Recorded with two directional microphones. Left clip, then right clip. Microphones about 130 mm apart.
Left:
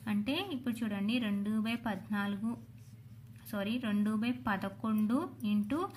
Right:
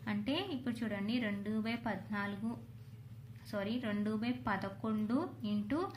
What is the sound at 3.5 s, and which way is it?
A woman's voice, 40° left (ahead or behind).